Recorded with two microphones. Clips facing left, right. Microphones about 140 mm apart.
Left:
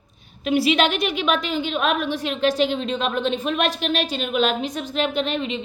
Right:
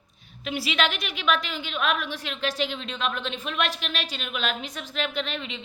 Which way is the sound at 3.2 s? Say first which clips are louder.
Left 10 dB; 50° left (ahead or behind).